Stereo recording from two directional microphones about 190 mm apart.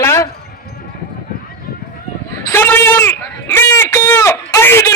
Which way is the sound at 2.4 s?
10° left (ahead or behind).